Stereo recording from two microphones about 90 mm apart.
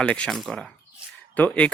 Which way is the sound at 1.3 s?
15° left (ahead or behind).